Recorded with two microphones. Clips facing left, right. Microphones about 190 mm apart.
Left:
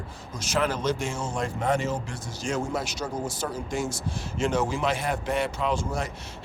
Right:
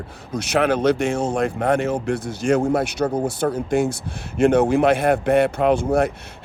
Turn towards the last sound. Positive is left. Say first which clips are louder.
# right 11 dB
turn(degrees=-60)  # may be behind; listen again after turning